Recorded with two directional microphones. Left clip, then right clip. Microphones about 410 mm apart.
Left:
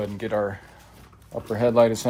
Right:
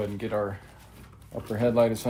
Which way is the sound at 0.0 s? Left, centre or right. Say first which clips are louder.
Left 4 dB; left.